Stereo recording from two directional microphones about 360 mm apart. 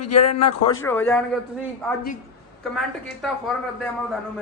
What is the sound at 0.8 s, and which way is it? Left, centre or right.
Speech, centre.